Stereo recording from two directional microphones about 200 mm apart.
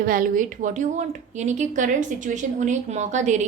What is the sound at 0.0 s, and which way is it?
A woman's voice, 45° right (ahead or behind).